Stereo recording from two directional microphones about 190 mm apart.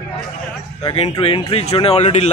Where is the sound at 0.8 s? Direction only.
25° left (ahead or behind).